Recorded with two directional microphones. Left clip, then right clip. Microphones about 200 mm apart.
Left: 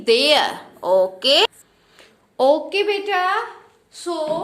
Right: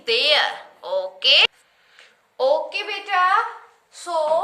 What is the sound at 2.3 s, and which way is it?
A woman's voice, 55° left (ahead or behind).